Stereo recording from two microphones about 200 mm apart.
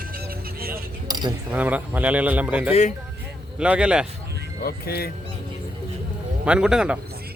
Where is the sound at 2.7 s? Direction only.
35° left (ahead or behind).